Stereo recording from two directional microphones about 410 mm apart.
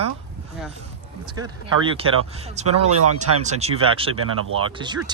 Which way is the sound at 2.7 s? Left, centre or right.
Right.